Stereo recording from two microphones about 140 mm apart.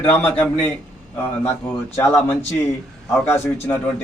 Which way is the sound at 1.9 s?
15° left (ahead or behind).